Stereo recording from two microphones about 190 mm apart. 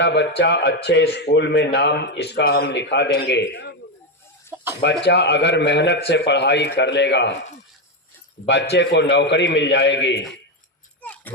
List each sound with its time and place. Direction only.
0.0 s speech: 65° left (ahead or behind)
4.5 s chicken: 10° right (ahead or behind)
5.0 s speech: 60° left (ahead or behind)
8.4 s speech: 40° left (ahead or behind)
8.7 s speech: 65° left (ahead or behind)
11.0 s a sound: 10° left (ahead or behind)